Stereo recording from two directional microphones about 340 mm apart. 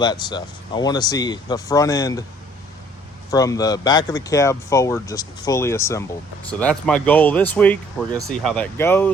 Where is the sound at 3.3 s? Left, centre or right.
Centre.